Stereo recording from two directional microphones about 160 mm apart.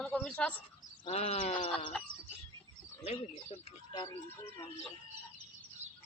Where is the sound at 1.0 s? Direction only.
40° left (ahead or behind).